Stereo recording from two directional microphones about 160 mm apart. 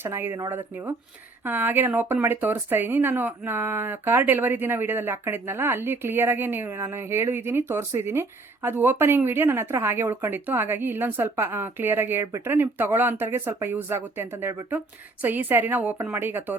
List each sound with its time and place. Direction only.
0.0 s speech: 15° right (ahead or behind)